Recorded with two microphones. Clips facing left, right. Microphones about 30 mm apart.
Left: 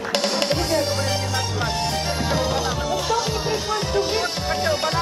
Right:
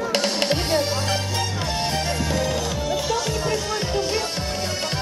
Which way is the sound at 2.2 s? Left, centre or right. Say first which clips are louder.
Left 2 dB; centre.